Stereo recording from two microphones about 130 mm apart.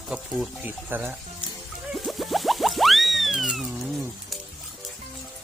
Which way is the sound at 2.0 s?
Centre (ahead or behind).